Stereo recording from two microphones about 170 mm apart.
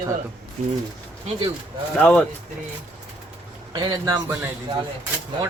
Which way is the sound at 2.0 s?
5° left (ahead or behind).